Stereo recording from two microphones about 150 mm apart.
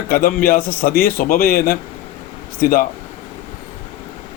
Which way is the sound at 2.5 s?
75° left (ahead or behind).